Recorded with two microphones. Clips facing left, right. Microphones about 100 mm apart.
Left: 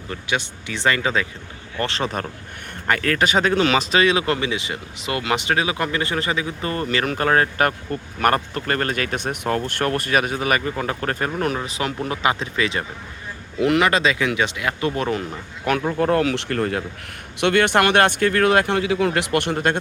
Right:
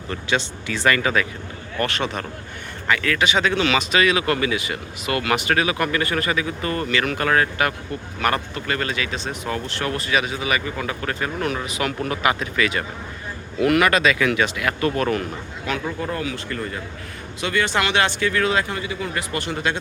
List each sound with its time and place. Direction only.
0.1 s speech: 15° left (ahead or behind)
2.8 s speech: 45° left (ahead or behind)
8.2 s speech: 45° left (ahead or behind); by 15.2 s 20° left (ahead or behind)
16.0 s speech: 65° left (ahead or behind)